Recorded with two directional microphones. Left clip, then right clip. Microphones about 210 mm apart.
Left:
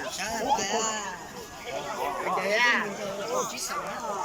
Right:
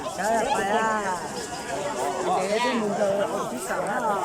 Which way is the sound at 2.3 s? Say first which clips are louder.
Left 4 dB; 20° right (ahead or behind).